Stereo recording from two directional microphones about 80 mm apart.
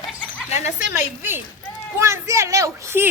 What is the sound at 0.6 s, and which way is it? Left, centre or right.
Speech, right.